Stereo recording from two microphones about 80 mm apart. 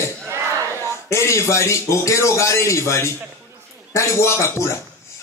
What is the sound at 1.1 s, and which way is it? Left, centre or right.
A man's voice, left.